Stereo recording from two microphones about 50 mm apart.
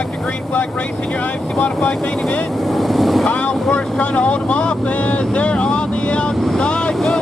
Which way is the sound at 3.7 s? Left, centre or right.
Left.